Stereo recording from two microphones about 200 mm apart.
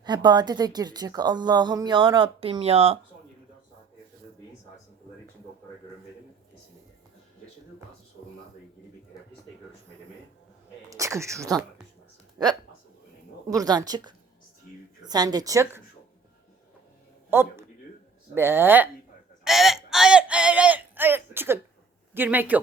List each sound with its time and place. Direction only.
0.0 s speech: 20° right (ahead or behind)
10.8 s speech: 15° right (ahead or behind)
17.3 s a man's voice: 10° right (ahead or behind)
19.5 s a sound: centre (ahead or behind)
22.1 s speech: 10° right (ahead or behind)